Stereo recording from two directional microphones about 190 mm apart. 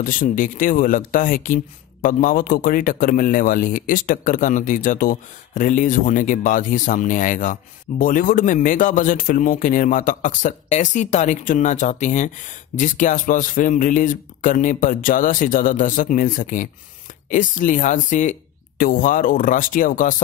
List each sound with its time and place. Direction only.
0.0 s speech: 45° left (ahead or behind)